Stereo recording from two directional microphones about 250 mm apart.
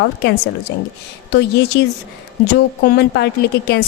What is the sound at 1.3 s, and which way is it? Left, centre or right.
Speech, left.